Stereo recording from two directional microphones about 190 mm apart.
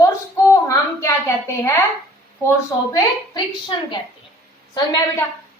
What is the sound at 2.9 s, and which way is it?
A woman's voice, 25° left (ahead or behind).